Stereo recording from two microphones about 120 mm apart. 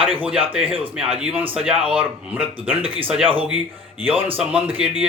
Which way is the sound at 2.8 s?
50° right (ahead or behind).